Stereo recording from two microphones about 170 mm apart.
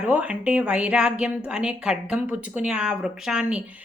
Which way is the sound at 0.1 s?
5° right (ahead or behind).